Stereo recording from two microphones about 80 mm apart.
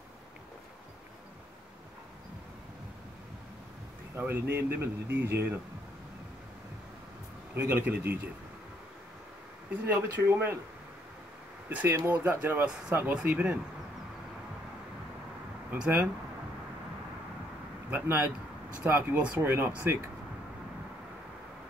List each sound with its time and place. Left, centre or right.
4.2 s speech: right
7.7 s speech: right
9.9 s speech: right
11.7 s speech: right
15.7 s speech: right
17.9 s speech: right
19.1 s speech: centre
19.4 s speech: right